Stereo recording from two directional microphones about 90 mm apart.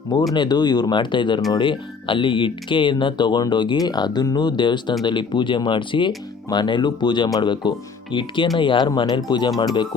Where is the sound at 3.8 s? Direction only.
50° left (ahead or behind).